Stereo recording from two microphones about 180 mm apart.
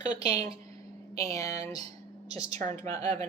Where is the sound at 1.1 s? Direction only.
20° left (ahead or behind).